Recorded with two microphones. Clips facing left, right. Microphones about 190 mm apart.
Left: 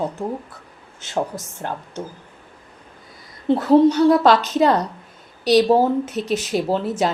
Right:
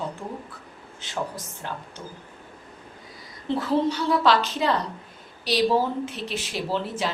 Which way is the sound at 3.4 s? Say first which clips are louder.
Left 9 dB; 50° left (ahead or behind).